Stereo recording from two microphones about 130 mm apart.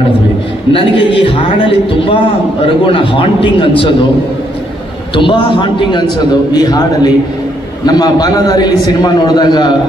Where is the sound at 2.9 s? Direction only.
40° left (ahead or behind).